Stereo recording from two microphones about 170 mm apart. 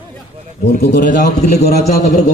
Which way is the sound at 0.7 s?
60° left (ahead or behind).